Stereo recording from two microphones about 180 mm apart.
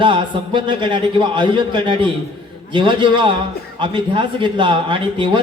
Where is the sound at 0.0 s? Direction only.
25° right (ahead or behind).